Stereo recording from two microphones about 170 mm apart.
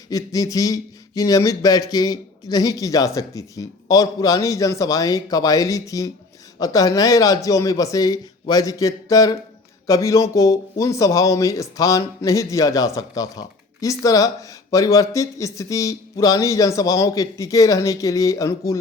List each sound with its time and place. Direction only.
0.1 s speech: 20° left (ahead or behind)